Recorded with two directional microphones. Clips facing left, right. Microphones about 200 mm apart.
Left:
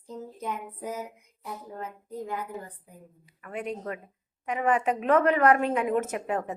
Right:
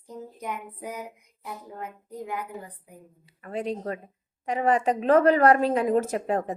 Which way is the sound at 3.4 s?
30° right (ahead or behind).